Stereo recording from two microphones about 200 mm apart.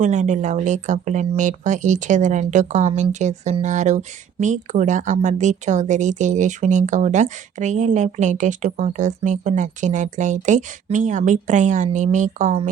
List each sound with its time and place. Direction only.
0.0 s speech: 35° right (ahead or behind)